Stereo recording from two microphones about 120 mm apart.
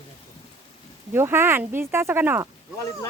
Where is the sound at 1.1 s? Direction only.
20° right (ahead or behind).